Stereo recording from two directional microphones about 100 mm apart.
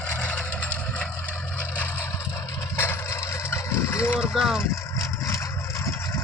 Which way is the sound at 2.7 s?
25° left (ahead or behind).